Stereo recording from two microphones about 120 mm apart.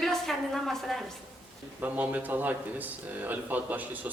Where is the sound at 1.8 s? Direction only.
15° right (ahead or behind).